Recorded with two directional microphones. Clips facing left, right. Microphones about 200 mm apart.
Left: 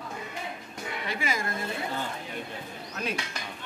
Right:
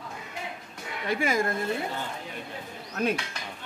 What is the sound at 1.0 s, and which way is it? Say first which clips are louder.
Speech: right 7 dB; 50° right (ahead or behind).